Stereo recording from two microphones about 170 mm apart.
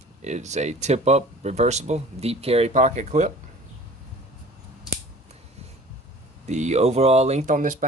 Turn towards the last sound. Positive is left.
turn(degrees=-50)  # may be behind; listen again after turning